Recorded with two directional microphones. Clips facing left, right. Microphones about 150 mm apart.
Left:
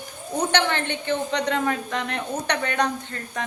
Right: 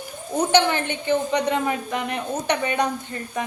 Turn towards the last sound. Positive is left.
turn(degrees=-10)  # may be behind; listen again after turning